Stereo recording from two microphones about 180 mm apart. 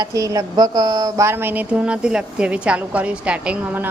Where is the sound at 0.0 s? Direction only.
20° right (ahead or behind).